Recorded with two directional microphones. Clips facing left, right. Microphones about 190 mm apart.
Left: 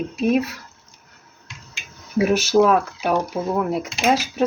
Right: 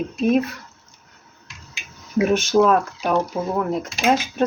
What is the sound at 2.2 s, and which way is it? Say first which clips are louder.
Speech: even; 5° left (ahead or behind).